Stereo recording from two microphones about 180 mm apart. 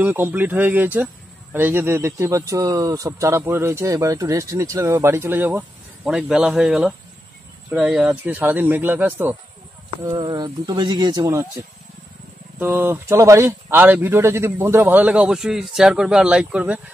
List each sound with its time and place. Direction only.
0.0 s speech: 10° right (ahead or behind)
10.0 s speech: 25° right (ahead or behind)
12.5 s speech: 10° right (ahead or behind)